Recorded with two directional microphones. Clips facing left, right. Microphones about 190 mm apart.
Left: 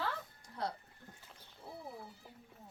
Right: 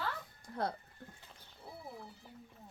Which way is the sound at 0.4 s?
50° right (ahead or behind).